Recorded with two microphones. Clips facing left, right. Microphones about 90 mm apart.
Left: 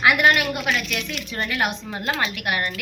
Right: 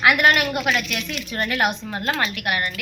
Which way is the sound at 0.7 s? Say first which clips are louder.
Right 2 dB; 5° right (ahead or behind).